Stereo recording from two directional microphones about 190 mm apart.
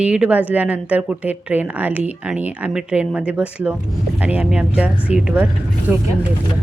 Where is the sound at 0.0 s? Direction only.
5° right (ahead or behind).